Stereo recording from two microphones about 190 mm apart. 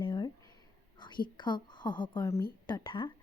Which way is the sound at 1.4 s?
25° left (ahead or behind).